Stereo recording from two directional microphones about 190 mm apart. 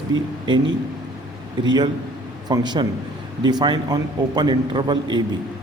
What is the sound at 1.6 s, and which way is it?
A man's voice, 25° right (ahead or behind).